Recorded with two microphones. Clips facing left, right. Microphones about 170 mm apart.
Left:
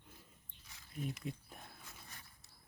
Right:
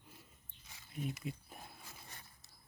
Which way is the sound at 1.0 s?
5° right (ahead or behind).